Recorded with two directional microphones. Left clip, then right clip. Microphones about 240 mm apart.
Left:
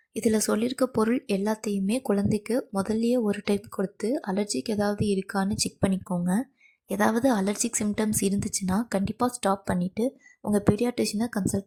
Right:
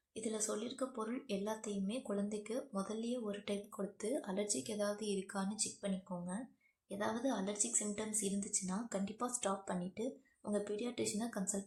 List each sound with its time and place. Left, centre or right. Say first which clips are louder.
0.1 s speech: left 16 dB; left